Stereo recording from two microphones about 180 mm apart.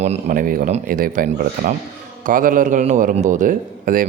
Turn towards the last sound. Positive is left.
turn(degrees=-50)  # may be behind; listen again after turning